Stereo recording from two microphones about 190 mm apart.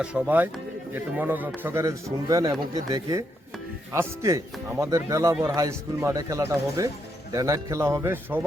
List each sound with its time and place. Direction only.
0.0 s speech: 5° right (ahead or behind)